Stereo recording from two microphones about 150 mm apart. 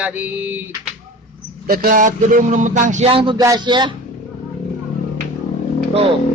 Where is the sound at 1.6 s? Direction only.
70° right (ahead or behind).